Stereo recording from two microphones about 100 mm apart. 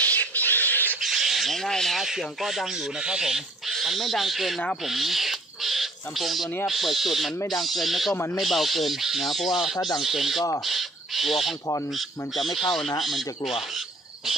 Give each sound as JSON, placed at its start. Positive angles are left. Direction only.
{"t": 0.0, "sound": "a sound", "side_deg": 15}
{"t": 1.0, "sound": "speech", "side_deg": 0}
{"t": 4.8, "sound": "owl", "side_deg": 0}
{"t": 6.6, "sound": "speech", "side_deg": 0}
{"t": 10.6, "sound": "a sound", "side_deg": 0}
{"t": 11.9, "sound": "speech", "side_deg": 0}